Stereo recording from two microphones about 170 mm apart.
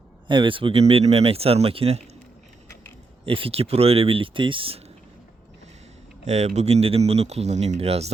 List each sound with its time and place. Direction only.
0.3 s speech: 30° right (ahead or behind)
3.2 s speech: 35° right (ahead or behind)
6.2 s speech: 40° right (ahead or behind)